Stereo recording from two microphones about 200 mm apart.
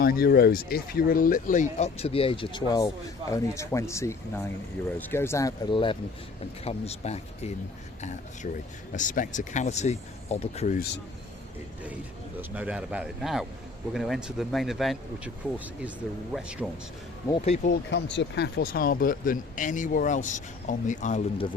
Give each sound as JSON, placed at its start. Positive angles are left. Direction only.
{"t": 0.0, "sound": "speech", "side_deg": 50}
{"t": 8.9, "sound": "speech", "side_deg": 40}
{"t": 12.4, "sound": "speech", "side_deg": -5}
{"t": 17.4, "sound": "speech", "side_deg": 45}
{"t": 17.9, "sound": "speech", "side_deg": 60}